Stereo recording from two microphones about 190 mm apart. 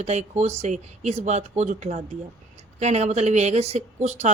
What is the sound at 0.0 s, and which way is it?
Speech, 35° right (ahead or behind).